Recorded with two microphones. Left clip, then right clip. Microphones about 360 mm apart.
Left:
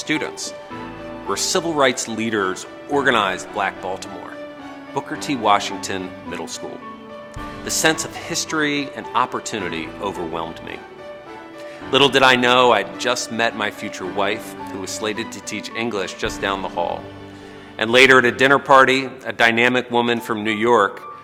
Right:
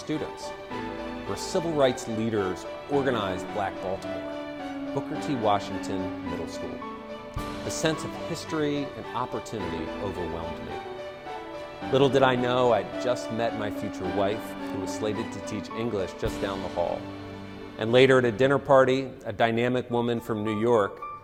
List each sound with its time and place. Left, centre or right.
0.1 s speech: right
1.3 s speech: right
5.2 s speech: right
7.7 s speech: right
11.9 s a man's voice: right
17.7 s a man's voice: right